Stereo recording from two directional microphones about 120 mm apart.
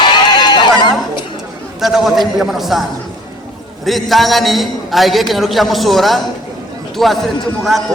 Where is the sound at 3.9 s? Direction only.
Centre (ahead or behind).